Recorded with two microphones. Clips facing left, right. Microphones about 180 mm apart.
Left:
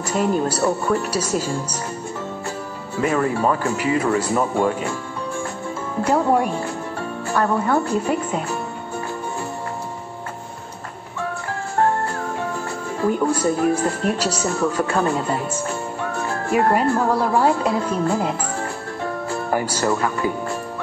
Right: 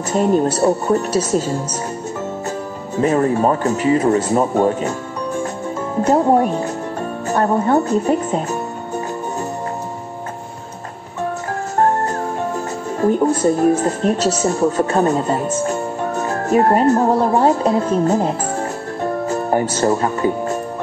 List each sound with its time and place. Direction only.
0.1 s speech: 30° right (ahead or behind)
3.0 s speech: 35° right (ahead or behind)
6.0 s speech: 35° right (ahead or behind)
13.0 s speech: 35° right (ahead or behind)
17.0 s speech: 25° right (ahead or behind)
19.2 s music: 40° right (ahead or behind)
19.8 s speech: 35° right (ahead or behind)